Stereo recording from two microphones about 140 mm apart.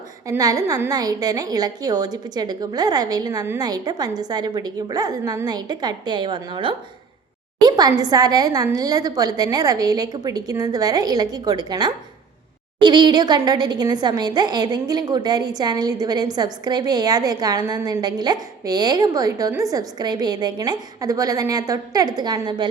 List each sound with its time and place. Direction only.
0.3 s a woman's voice: 25° right (ahead or behind)